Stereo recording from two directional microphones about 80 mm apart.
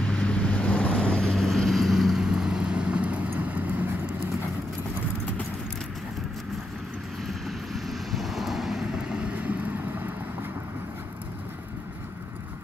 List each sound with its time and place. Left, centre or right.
0.0 s vehicle: centre
7.4 s vehicle: centre
9.5 s vehicle: right